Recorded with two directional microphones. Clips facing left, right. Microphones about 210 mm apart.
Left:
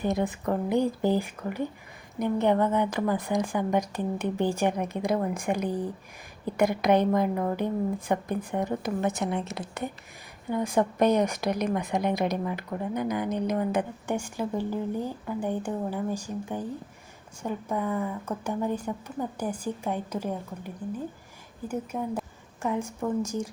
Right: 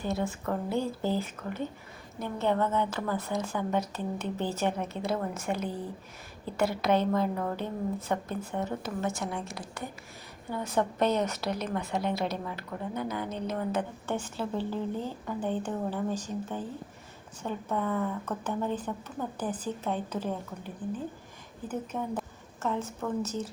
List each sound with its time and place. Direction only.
0.0 s a woman's voice: 15° left (ahead or behind)